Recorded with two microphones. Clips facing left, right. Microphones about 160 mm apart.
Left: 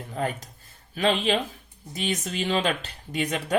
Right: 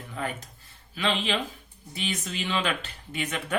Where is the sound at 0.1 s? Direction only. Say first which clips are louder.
Left 4 dB; 40° left (ahead or behind).